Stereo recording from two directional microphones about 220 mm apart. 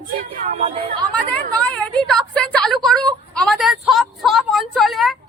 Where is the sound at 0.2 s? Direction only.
35° right (ahead or behind).